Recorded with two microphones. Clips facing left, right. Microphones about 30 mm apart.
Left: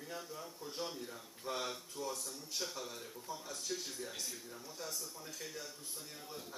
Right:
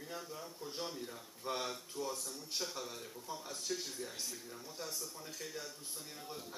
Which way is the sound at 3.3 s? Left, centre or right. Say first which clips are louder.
Even; right.